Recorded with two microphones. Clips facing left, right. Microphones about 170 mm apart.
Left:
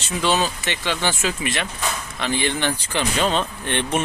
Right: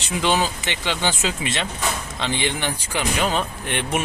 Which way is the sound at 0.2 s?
15° right (ahead or behind).